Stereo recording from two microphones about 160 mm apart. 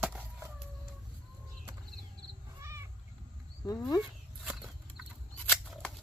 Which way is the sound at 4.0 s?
5° right (ahead or behind).